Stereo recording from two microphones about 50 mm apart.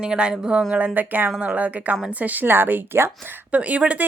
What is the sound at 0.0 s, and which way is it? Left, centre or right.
Speech, centre.